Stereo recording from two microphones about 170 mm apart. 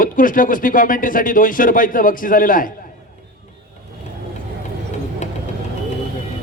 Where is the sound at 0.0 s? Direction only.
55° left (ahead or behind).